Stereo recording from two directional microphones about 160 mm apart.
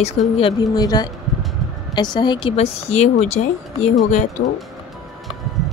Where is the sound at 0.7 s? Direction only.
25° left (ahead or behind); by 3.8 s 50° left (ahead or behind).